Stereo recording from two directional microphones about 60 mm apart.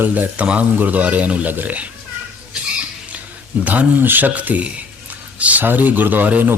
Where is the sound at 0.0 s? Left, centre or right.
Right.